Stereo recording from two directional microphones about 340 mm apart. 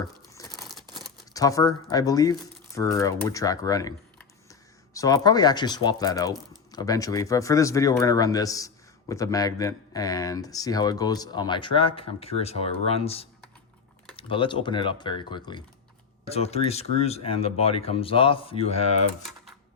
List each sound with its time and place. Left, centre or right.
0.3 s tearing: centre
0.6 s scissors: centre
1.0 s speech: centre